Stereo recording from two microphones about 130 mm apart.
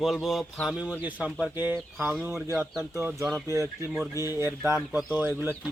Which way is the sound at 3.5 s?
25° right (ahead or behind).